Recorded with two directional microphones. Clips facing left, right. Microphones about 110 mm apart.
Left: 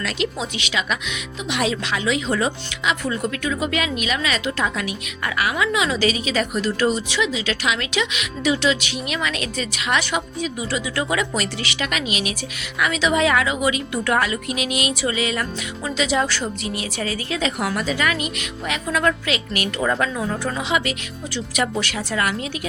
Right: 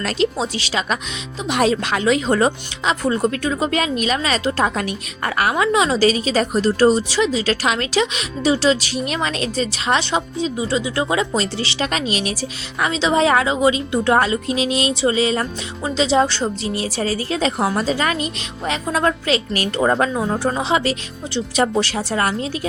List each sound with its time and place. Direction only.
0.0 s speech: 35° right (ahead or behind)